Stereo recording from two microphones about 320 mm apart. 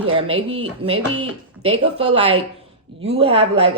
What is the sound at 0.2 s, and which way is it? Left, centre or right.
Speech, centre.